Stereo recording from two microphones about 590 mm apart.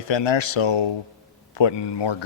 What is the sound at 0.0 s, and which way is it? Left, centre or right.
Speech, left.